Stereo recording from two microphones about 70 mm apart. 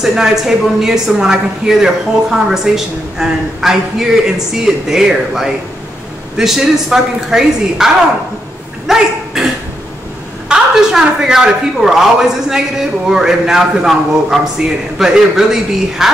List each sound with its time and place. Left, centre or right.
0.0 s a man's voice: centre
8.8 s a sound: centre
10.5 s a man's voice: centre